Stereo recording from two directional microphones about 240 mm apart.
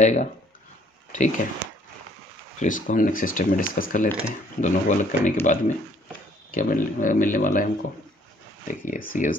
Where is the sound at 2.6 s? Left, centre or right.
Left.